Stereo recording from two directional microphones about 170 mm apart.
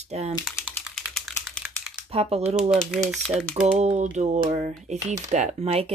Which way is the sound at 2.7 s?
Centre (ahead or behind).